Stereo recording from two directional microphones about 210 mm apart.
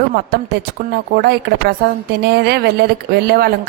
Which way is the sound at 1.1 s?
50° right (ahead or behind).